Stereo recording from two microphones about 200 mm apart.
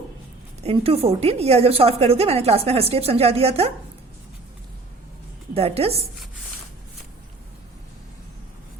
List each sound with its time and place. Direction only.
0.6 s a woman's voice: 30° right (ahead or behind)
5.5 s a woman's voice: 30° right (ahead or behind)